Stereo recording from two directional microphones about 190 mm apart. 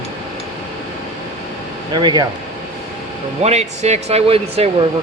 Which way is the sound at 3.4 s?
35° right (ahead or behind).